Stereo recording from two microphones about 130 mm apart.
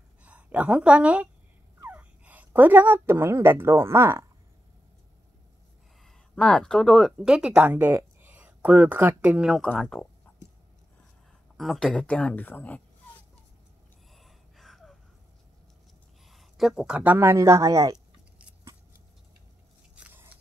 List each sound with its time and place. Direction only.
0.2 s a woman's voice: 10° right (ahead or behind)
6.0 s speech: 5° left (ahead or behind)
9.7 s speech: 10° left (ahead or behind)
11.5 s speech: centre (ahead or behind)
14.1 s gasp: centre (ahead or behind)
16.3 s speech: centre (ahead or behind); by 17.9 s 25° right (ahead or behind)
20.0 s biting: 15° right (ahead or behind)